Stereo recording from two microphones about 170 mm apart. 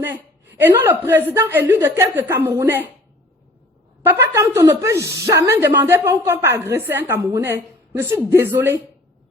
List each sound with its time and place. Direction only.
0.7 s a woman's voice: 20° right (ahead or behind)
4.0 s a woman's voice: 15° right (ahead or behind)